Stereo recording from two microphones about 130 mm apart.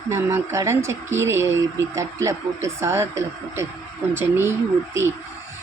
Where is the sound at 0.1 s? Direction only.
20° right (ahead or behind).